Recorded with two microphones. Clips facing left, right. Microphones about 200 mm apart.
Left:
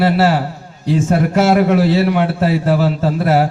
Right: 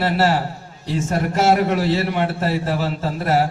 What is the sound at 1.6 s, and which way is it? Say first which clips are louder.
A man's voice: left 6 dB; 50° left (ahead or behind).